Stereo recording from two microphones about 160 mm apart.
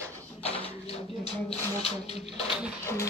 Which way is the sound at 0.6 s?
40° left (ahead or behind).